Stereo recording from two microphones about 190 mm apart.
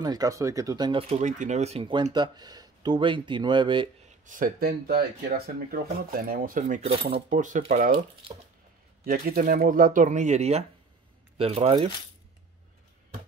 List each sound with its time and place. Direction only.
0.0 s speech: 20° right (ahead or behind)
4.3 s speech: 50° right (ahead or behind); by 8.3 s 35° right (ahead or behind)
9.0 s speech: 50° right (ahead or behind); by 11.9 s 30° right (ahead or behind)